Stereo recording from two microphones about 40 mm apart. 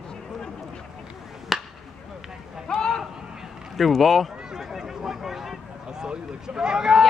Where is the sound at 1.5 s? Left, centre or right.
Centre.